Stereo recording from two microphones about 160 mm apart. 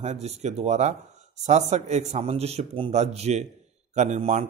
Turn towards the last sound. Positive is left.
turn(degrees=-50)  # may be behind; listen again after turning